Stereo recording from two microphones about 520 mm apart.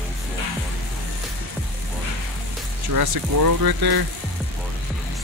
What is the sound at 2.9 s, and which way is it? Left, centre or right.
Speech, right.